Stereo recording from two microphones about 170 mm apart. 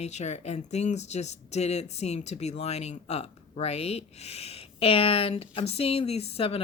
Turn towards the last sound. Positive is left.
turn(degrees=35)  # may be behind; listen again after turning